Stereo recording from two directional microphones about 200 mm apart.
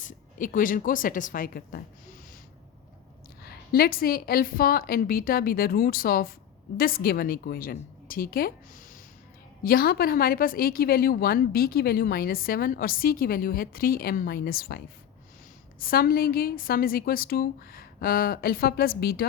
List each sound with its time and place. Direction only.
0.0 s a woman's voice: 40° left (ahead or behind)
3.4 s a woman's voice: 50° left (ahead or behind)
15.8 s a woman's voice: 45° left (ahead or behind)